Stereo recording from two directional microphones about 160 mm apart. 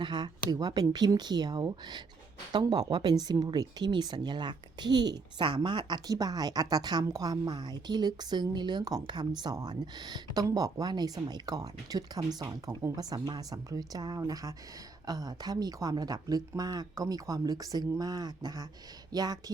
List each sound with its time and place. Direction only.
0.0 s speech: 25° right (ahead or behind)